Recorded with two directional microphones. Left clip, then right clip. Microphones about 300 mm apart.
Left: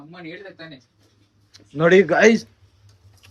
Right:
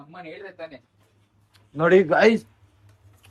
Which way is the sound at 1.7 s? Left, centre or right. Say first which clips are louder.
Left 2 dB; centre.